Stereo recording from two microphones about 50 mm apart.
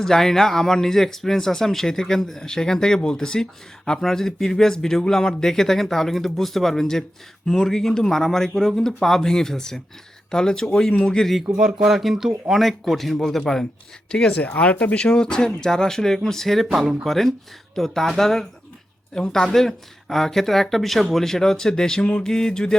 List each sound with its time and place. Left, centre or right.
0.0 s speech: centre
11.3 s speech: centre
14.1 s speech: centre
14.3 s speech: left